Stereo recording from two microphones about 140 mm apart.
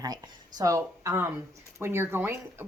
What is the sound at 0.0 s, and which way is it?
A woman's voice, 30° right (ahead or behind).